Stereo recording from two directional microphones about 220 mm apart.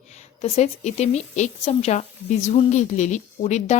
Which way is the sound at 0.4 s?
30° left (ahead or behind).